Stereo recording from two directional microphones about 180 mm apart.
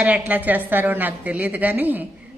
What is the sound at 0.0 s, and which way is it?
A woman's voice, 10° right (ahead or behind).